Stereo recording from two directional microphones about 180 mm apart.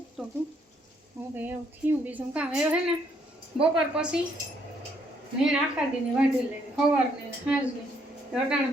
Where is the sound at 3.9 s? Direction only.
5° right (ahead or behind).